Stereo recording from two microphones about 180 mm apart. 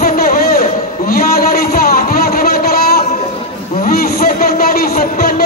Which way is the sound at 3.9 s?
55° left (ahead or behind).